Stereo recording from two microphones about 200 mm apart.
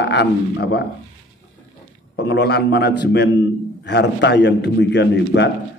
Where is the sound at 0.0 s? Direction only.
60° left (ahead or behind).